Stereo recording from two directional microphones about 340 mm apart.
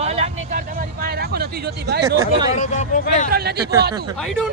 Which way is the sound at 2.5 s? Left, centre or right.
Left.